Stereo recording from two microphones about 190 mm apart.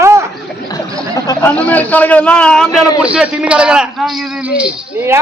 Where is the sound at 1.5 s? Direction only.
10° left (ahead or behind).